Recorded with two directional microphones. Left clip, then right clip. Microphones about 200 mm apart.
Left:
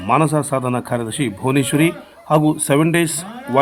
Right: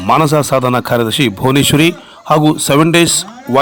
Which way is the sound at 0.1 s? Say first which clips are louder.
Right 6 dB; 35° right (ahead or behind).